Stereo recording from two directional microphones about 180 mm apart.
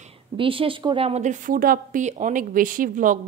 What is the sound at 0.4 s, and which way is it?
A woman's voice, 30° right (ahead or behind).